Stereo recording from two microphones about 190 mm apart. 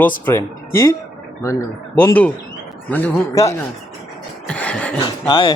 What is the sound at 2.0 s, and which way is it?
A man's voice, 10° left (ahead or behind).